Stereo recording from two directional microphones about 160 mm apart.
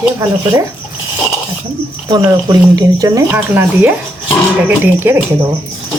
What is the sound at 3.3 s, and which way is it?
Speech, 10° right (ahead or behind).